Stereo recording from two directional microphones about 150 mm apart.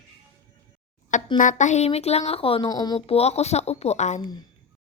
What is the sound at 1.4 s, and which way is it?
A woman's voice, 55° left (ahead or behind).